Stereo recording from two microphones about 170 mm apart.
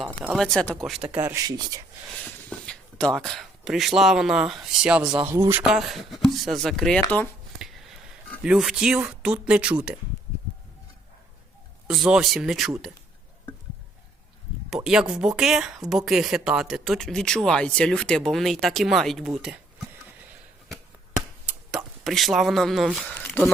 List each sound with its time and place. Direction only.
0.0 s speech: centre (ahead or behind)
1.1 s speech: 10° right (ahead or behind)
1.5 s speech: 25° right (ahead or behind)
2.0 s speech: 5° left (ahead or behind)
7.6 s a sound: centre (ahead or behind)
8.4 s speech: 5° right (ahead or behind)
11.9 s speech: centre (ahead or behind)
14.8 s speech: 5° right (ahead or behind)
21.4 s a sound: 5° right (ahead or behind); by 23.5 s 10° left (ahead or behind)